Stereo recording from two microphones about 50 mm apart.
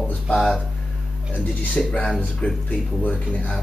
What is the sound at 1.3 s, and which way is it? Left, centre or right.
Speech, left.